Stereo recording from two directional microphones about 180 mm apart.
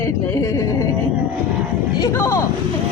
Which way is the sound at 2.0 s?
15° left (ahead or behind).